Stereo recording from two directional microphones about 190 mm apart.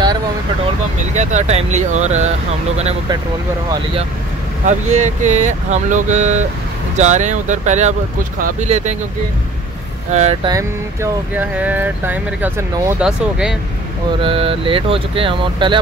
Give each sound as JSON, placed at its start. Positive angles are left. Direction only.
{"t": 1.1, "sound": "speech", "side_deg": -40}
{"t": 4.6, "sound": "speech", "side_deg": -40}
{"t": 10.4, "sound": "speech", "side_deg": -15}
{"t": 14.2, "sound": "speech", "side_deg": -30}